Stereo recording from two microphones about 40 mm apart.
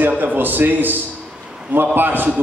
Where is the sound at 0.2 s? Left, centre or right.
Right.